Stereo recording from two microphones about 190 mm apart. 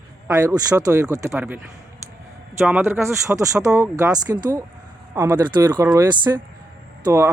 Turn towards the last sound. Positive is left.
turn(degrees=-15)  # may be behind; listen again after turning